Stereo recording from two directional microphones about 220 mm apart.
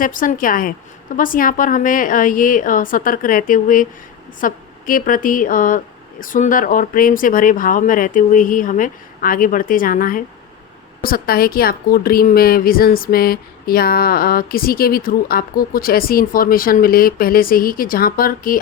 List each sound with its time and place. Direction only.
0.0 s a woman's voice: 35° left (ahead or behind)